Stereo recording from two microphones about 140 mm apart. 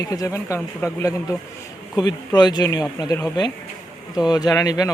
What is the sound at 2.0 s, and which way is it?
Speech, 30° left (ahead or behind).